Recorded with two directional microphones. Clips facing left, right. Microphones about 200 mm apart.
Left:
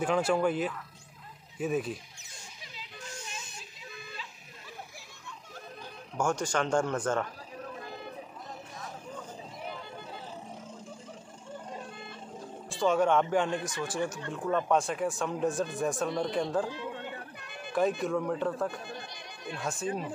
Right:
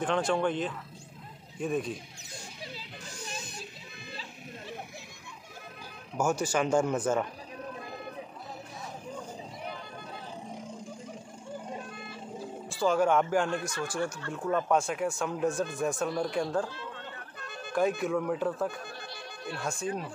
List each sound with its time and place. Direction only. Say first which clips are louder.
0.0 s speech: left 1 dB; 5° left (ahead or behind)
2.3 s music: right 7 dB; 35° right (ahead or behind)
4.1 s a sound: right 4 dB; 35° right (ahead or behind)
6.1 s speech: right 1 dB; 5° right (ahead or behind)
10.5 s a sound: right 3 dB; 15° right (ahead or behind)
12.1 s music: right 3 dB; 5° right (ahead or behind)
13.9 s speech: left 1 dB; 20° left (ahead or behind)
14.3 s speech: even; centre (ahead or behind)
16.6 s a sound: left 4 dB; 15° left (ahead or behind)
17.7 s speech: even; centre (ahead or behind)